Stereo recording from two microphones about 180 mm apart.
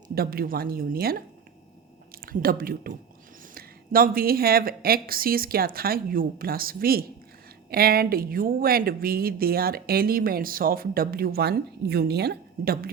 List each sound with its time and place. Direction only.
0.1 s speech: 55° right (ahead or behind)